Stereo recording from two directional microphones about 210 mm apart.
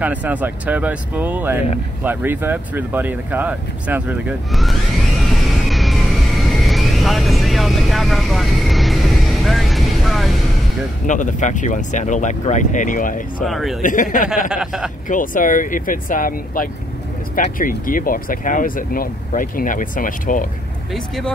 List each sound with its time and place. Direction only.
0.0 s speech: 5° right (ahead or behind)
5.2 s music: centre (ahead or behind)
6.5 s vehicle: centre (ahead or behind)
11.1 s speech: 35° left (ahead or behind)
13.4 s a man's voice: centre (ahead or behind)
13.8 s speech: 40° left (ahead or behind)
14.5 s a man's voice: 5° right (ahead or behind)
15.0 s speech: 40° left (ahead or behind)